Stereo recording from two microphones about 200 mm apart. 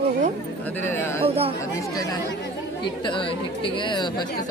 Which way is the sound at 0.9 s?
10° left (ahead or behind).